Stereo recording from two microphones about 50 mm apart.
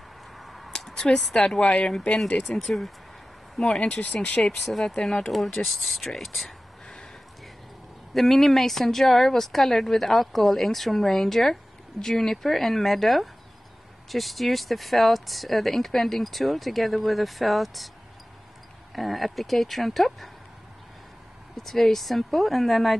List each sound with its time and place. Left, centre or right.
0.4 s a sound: centre
0.7 s speech: centre
3.5 s speech: centre
3.8 s speech: left
4.4 s speech: centre
8.1 s speech: centre
18.9 s speech: centre
21.5 s speech: centre